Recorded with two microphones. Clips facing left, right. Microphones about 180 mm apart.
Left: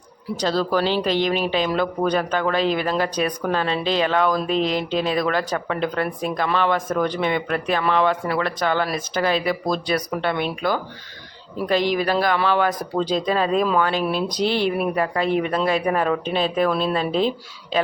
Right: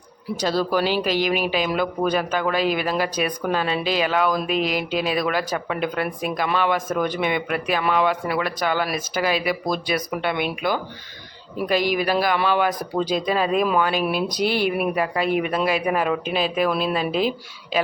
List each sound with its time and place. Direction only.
0.3 s speech: 10° right (ahead or behind)
1.0 s speech: 25° left (ahead or behind)
1.3 s speech: 10° right (ahead or behind)